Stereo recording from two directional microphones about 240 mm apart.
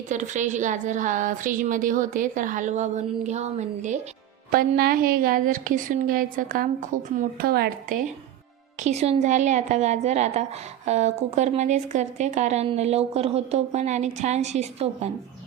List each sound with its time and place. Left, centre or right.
0.1 s a woman's voice: right
8.8 s a woman's voice: right